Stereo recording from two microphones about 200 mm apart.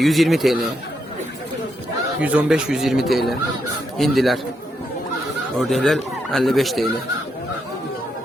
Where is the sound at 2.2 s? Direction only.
5° right (ahead or behind).